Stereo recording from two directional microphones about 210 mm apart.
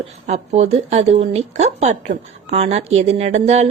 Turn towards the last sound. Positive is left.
turn(degrees=-30)  # may be behind; listen again after turning